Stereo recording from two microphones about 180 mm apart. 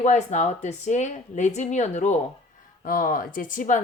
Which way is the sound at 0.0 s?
40° left (ahead or behind).